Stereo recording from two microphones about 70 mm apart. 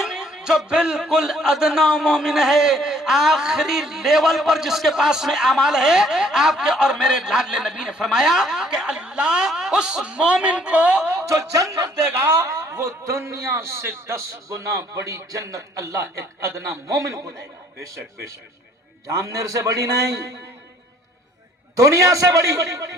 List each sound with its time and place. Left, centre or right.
0.0 s a man's voice: centre
11.1 s speech: right
12.0 s a man's voice: right
14.5 s a man's voice: right
19.0 s a man's voice: right
21.8 s a man's voice: right